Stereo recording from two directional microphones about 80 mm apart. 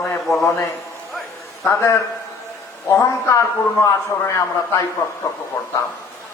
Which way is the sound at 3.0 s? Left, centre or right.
Left.